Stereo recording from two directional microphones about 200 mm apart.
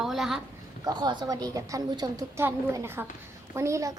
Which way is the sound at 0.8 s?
20° right (ahead or behind).